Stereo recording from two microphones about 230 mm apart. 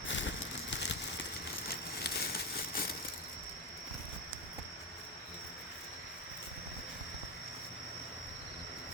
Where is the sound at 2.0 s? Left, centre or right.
Left.